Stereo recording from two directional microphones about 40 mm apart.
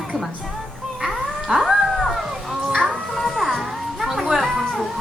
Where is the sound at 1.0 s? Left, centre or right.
Centre.